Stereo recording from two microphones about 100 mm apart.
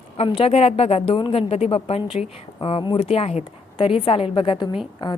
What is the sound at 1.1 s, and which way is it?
A woman's voice, 70° left (ahead or behind).